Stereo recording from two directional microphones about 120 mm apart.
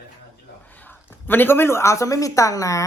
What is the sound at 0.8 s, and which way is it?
Speech, 15° left (ahead or behind).